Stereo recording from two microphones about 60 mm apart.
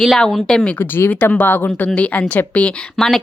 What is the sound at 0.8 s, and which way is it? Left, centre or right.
Speech, left.